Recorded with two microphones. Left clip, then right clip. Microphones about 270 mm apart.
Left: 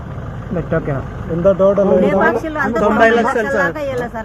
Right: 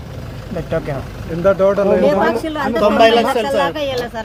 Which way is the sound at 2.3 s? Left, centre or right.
Centre.